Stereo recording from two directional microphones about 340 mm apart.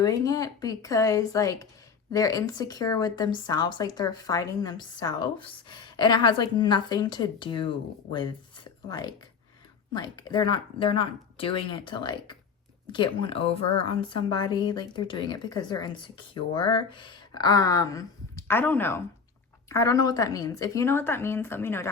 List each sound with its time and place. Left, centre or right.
0.0 s speech: centre